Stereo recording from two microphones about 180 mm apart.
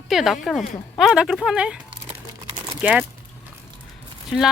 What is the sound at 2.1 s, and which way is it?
Crumpling, 25° right (ahead or behind).